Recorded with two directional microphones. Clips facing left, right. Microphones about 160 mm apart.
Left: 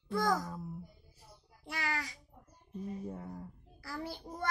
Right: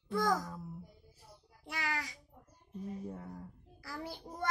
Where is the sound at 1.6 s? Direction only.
15° right (ahead or behind).